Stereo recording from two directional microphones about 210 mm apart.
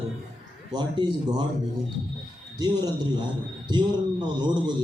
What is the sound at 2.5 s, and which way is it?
Speech, 20° right (ahead or behind).